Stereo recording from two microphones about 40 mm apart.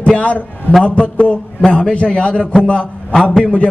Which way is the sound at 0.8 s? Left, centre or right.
Left.